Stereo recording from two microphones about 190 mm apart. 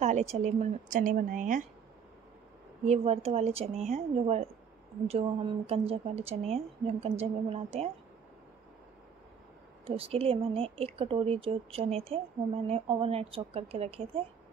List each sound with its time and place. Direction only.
0.0 s speech: 35° right (ahead or behind)
2.9 s speech: 35° right (ahead or behind)
9.8 s speech: 30° right (ahead or behind)